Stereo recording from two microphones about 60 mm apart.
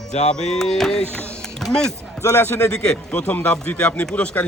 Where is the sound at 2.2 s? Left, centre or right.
Left.